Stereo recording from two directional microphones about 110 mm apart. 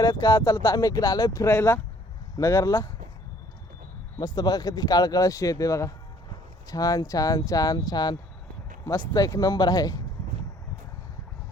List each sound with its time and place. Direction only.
0.0 s speech: 35° left (ahead or behind)
4.2 s speech: 40° left (ahead or behind)